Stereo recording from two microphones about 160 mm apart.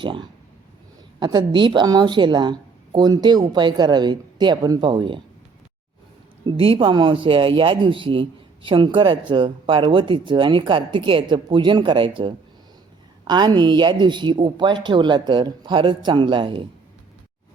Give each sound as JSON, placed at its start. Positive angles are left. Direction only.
{"t": 0.0, "sound": "a woman's voice", "side_deg": -30}
{"t": 6.4, "sound": "a woman's voice", "side_deg": -30}